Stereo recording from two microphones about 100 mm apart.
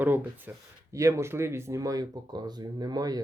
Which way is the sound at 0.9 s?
30° right (ahead or behind).